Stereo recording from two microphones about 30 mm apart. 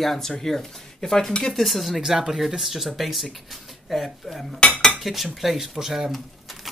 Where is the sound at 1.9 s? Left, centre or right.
Centre.